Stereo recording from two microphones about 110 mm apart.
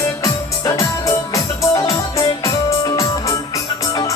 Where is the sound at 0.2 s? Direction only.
30° left (ahead or behind).